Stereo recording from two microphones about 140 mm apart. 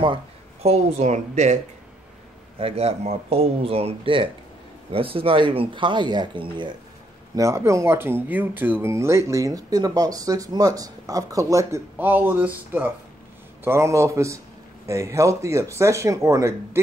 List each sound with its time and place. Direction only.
0.0 s speech: 40° right (ahead or behind)
2.6 s speech: 45° right (ahead or behind)
7.3 s speech: 20° right (ahead or behind)